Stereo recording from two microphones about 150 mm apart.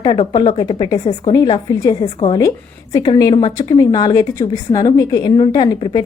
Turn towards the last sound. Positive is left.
turn(degrees=25)  # may be behind; listen again after turning